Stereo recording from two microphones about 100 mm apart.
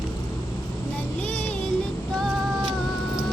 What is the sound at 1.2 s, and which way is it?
Music, 15° left (ahead or behind).